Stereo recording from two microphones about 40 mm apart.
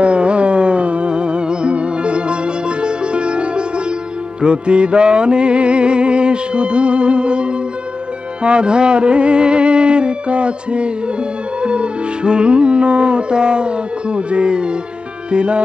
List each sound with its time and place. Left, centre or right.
0.0 s music: right